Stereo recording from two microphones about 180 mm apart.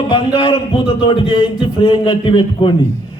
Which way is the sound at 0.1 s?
30° left (ahead or behind).